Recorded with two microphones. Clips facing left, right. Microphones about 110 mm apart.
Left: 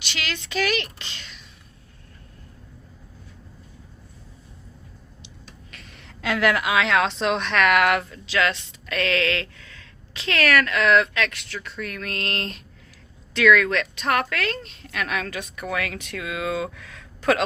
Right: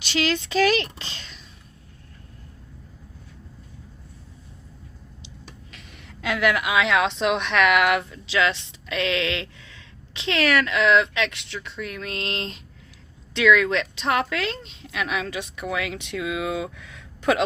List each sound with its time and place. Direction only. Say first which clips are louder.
0.0 s a woman's voice: right 8 dB; 35° right (ahead or behind)
5.7 s a woman's voice: even; 10° right (ahead or behind)